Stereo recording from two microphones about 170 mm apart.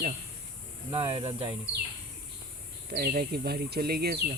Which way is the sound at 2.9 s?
60° right (ahead or behind).